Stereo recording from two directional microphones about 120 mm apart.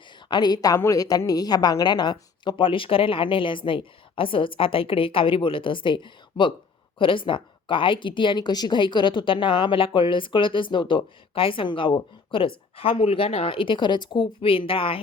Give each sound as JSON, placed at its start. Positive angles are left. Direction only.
{"t": 0.3, "sound": "a woman's voice", "side_deg": 35}